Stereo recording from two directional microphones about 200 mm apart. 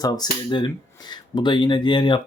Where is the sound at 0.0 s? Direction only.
20° left (ahead or behind).